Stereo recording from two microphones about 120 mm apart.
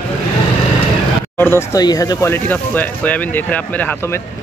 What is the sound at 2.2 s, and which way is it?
Speech, 15° left (ahead or behind).